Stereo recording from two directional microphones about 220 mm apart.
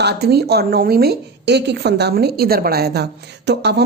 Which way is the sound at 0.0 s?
45° right (ahead or behind).